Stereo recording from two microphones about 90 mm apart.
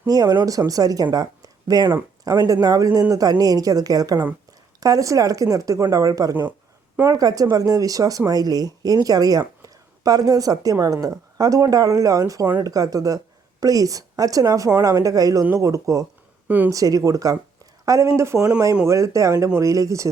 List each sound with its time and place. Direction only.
0.1 s a woman's voice: 45° right (ahead or behind)